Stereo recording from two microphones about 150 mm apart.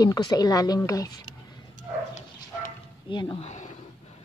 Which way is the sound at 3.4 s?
50° left (ahead or behind).